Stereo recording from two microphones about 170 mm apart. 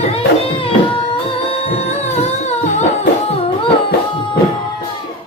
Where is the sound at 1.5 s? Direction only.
35° left (ahead or behind).